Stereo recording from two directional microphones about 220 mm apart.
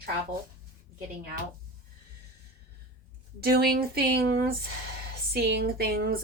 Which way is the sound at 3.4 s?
45° right (ahead or behind).